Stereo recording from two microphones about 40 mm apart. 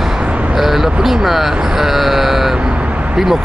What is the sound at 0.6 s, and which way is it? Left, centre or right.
Vehicle, centre.